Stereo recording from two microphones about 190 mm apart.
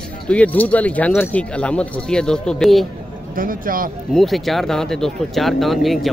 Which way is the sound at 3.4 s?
50° right (ahead or behind).